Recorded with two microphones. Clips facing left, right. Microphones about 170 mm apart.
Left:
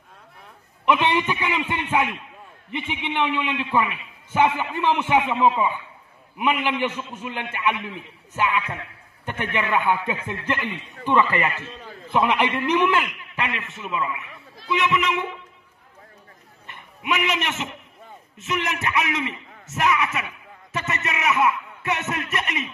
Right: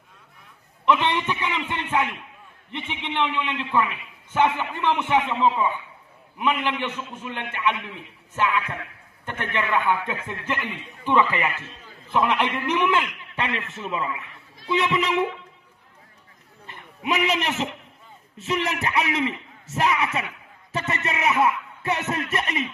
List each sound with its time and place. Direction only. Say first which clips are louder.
0.8 s a man's voice: left 1 dB; 10° left (ahead or behind)
12.1 s a man's voice: left 1 dB; 5° left (ahead or behind)
12.6 s a man's voice: left 3 dB; 5° right (ahead or behind)
12.9 s a man's voice: even; 30° right (ahead or behind)
16.6 s a man's voice: even; 30° right (ahead or behind)